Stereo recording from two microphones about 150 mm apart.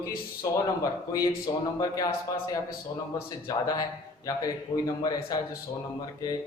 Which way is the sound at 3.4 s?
25° left (ahead or behind).